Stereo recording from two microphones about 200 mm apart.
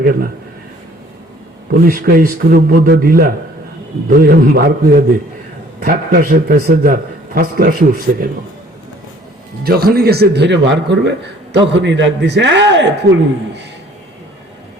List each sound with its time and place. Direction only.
1.8 s a man's voice: 45° right (ahead or behind)
9.6 s a man's voice: 50° right (ahead or behind)